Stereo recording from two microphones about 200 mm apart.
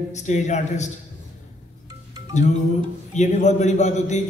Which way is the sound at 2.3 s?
35° left (ahead or behind).